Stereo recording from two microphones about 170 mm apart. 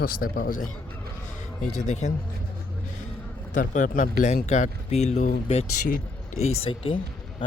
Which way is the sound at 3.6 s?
50° left (ahead or behind).